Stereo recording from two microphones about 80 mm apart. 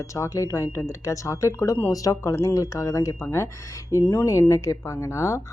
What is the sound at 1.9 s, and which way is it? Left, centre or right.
Speech, left.